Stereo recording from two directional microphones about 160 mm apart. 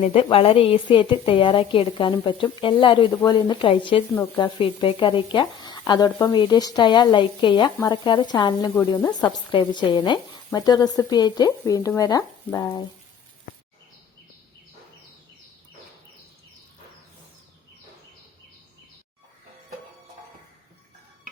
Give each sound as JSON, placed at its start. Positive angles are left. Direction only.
{"t": 0.0, "sound": "a woman's voice", "side_deg": 40}